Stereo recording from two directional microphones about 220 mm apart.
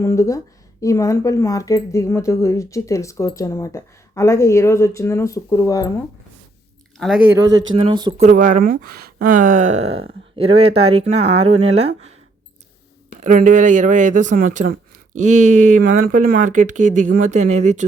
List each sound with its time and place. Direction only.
0.0 s speech: 15° left (ahead or behind)
7.0 s speech: 5° right (ahead or behind)
7.8 s speech: 20° right (ahead or behind)
8.2 s speech: 40° right (ahead or behind)
13.2 s speech: 35° right (ahead or behind)